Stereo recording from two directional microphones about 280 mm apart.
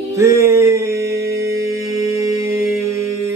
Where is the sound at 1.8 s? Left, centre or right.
Centre.